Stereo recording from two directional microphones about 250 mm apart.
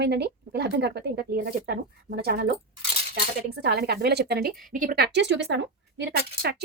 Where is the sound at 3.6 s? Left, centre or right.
Right.